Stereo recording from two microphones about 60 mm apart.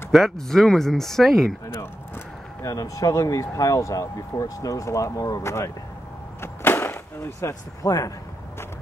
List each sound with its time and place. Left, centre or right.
0.1 s speech: centre
2.6 s speech: left
5.4 s speech: left
6.4 s vehicle: left
7.8 s speech: left